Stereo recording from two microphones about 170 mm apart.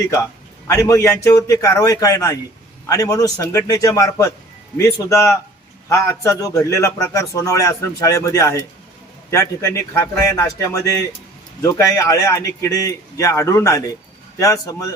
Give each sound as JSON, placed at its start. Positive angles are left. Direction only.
{"t": 0.7, "sound": "a man's voice", "side_deg": 20}